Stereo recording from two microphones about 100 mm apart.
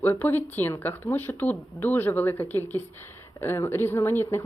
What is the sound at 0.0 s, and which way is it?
A woman's voice, 20° left (ahead or behind).